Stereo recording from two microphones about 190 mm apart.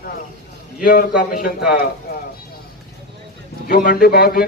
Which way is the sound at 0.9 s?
50° left (ahead or behind).